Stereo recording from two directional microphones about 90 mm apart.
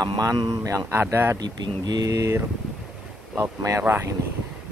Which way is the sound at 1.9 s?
45° right (ahead or behind).